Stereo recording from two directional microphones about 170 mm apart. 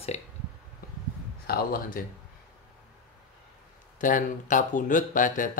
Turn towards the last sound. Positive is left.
turn(degrees=50)  # may be behind; listen again after turning